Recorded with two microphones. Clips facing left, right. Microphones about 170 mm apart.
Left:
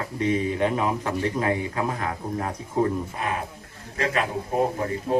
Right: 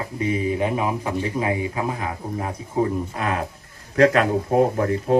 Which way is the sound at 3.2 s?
65° right (ahead or behind).